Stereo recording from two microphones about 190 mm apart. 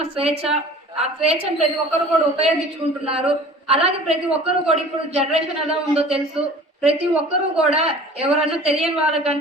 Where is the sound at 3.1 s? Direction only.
30° right (ahead or behind).